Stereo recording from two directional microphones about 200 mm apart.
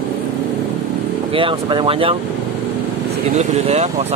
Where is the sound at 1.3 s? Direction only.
25° right (ahead or behind).